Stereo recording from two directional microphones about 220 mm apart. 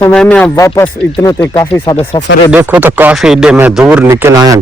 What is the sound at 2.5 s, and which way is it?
Speech, 5° right (ahead or behind).